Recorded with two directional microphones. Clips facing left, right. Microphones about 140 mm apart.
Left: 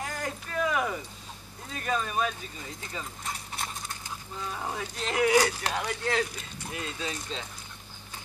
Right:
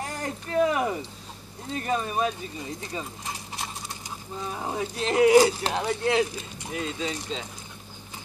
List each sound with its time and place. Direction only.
0.0 s speech: 30° right (ahead or behind)
4.4 s speech: 20° right (ahead or behind)
6.7 s speech: centre (ahead or behind)